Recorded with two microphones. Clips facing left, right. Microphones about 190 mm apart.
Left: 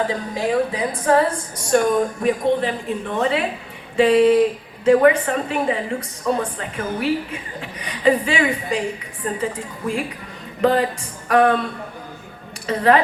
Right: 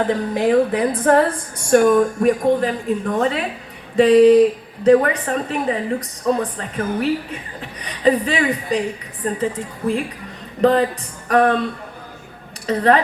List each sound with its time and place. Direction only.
0.1 s a woman's voice: 60° right (ahead or behind); by 9.4 s 40° right (ahead or behind)
10.6 s a woman's voice: 35° right (ahead or behind)
12.6 s a woman's voice: 35° right (ahead or behind)